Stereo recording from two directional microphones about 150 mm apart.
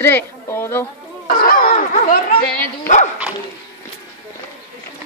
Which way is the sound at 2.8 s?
55° left (ahead or behind).